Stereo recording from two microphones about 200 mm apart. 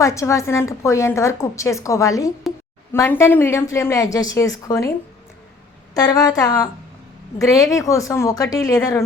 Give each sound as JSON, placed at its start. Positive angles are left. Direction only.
{"t": 0.0, "sound": "a woman's voice", "side_deg": 15}
{"t": 5.9, "sound": "a woman's voice", "side_deg": 20}